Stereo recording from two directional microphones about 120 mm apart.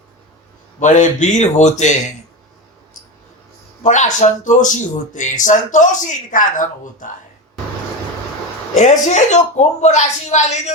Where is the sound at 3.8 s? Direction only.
90° left.